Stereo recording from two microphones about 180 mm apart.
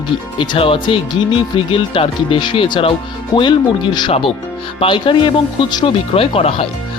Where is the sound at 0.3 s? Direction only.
30° left (ahead or behind).